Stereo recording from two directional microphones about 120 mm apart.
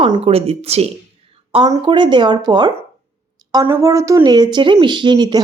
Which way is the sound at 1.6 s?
35° right (ahead or behind).